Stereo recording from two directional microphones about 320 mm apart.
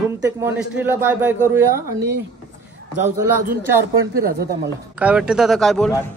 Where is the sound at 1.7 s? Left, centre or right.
Right.